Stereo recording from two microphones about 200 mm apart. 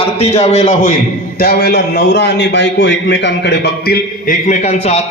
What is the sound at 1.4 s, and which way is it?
A man's voice, 50° left (ahead or behind).